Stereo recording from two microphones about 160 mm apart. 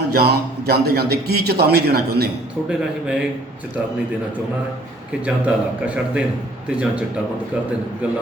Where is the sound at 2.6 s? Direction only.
5° right (ahead or behind).